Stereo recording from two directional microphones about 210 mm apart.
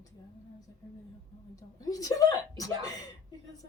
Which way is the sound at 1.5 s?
15° left (ahead or behind).